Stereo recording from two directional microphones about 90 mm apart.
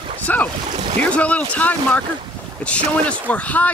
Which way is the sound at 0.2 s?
20° left (ahead or behind).